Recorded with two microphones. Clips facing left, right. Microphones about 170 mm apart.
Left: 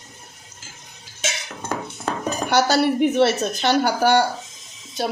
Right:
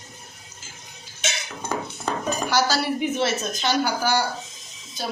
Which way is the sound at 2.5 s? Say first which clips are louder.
Left 6 dB; 60° left (ahead or behind).